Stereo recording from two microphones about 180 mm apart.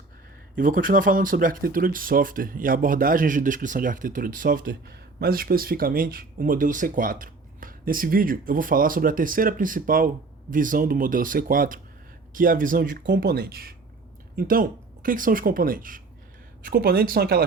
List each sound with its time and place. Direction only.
0.5 s speech: 50° right (ahead or behind)
13.0 s speech: 75° right (ahead or behind)